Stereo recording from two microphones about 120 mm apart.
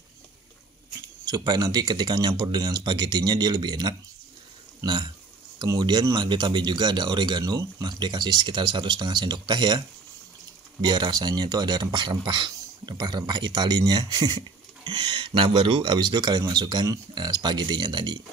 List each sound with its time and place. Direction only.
1.2 s speech: 35° right (ahead or behind)